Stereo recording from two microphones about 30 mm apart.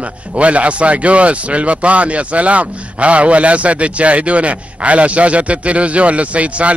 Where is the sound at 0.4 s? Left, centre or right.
Right.